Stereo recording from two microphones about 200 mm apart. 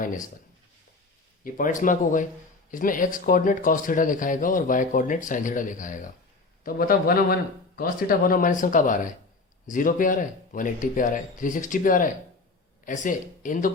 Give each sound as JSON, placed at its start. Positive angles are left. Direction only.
{"t": 0.0, "sound": "speech", "side_deg": 40}
{"t": 1.8, "sound": "a man's voice", "side_deg": 40}